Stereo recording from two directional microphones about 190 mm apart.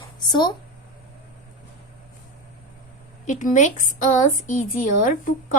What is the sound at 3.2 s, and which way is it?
A woman's voice, 40° left (ahead or behind).